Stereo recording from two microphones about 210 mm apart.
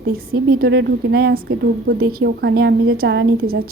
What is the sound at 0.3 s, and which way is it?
A woman's voice, 50° right (ahead or behind).